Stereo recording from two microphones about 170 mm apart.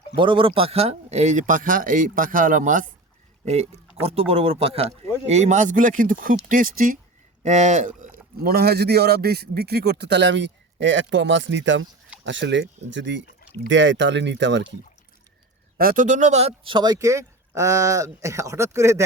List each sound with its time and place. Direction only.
0.2 s speech: 30° right (ahead or behind); by 2.8 s 50° right (ahead or behind)
3.4 s speech: 40° right (ahead or behind); by 7.0 s 55° right (ahead or behind)
7.4 s speech: 45° right (ahead or behind); by 14.6 s 90° right
15.8 s speech: 55° right (ahead or behind); by 19.0 s 15° right (ahead or behind)